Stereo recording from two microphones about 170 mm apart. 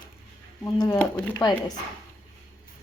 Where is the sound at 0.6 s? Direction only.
15° left (ahead or behind).